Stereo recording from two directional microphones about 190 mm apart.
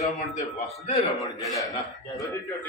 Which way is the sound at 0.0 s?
40° left (ahead or behind).